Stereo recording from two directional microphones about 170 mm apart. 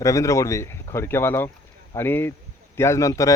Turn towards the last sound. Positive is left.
turn(degrees=20)  # may be behind; listen again after turning